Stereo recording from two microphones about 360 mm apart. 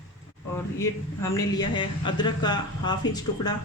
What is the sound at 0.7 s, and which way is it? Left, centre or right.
Speech, centre.